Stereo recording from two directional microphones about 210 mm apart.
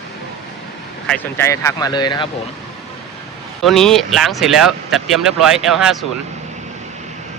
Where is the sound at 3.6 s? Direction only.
Centre (ahead or behind).